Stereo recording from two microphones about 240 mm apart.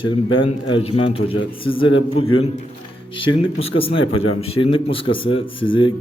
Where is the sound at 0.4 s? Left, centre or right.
Left.